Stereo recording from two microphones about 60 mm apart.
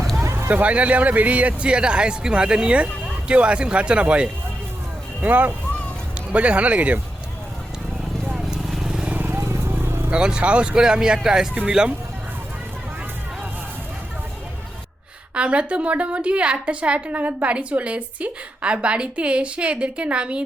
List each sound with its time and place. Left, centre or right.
0.2 s a sound: right
0.5 s a woman's voice: right
8.3 s vehicle: centre
9.1 s vehicle: right
10.1 s speech: centre
15.4 s a woman's voice: centre